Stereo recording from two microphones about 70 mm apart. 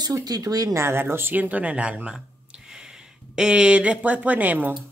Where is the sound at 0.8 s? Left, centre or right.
Right; by 2.1 s centre.